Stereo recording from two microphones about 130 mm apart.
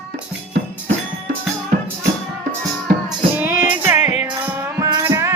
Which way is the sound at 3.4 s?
10° right (ahead or behind).